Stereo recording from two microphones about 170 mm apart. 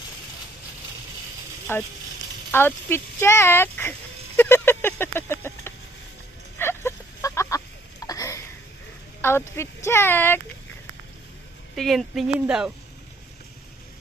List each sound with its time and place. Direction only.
1.7 s speech: 15° left (ahead or behind)
4.4 s a sound: 15° left (ahead or behind)
9.2 s speech: 15° left (ahead or behind)
11.7 s a woman's voice: centre (ahead or behind)